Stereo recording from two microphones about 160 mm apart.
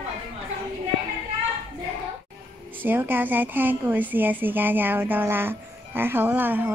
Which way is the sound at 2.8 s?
10° right (ahead or behind).